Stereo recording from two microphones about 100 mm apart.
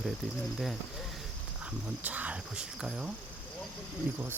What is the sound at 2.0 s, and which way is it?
Speech, 15° right (ahead or behind).